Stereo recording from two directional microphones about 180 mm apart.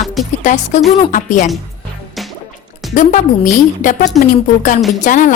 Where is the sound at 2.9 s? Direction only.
45° left (ahead or behind).